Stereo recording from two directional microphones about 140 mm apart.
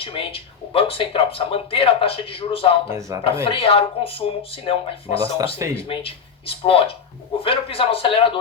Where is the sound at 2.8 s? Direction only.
20° right (ahead or behind).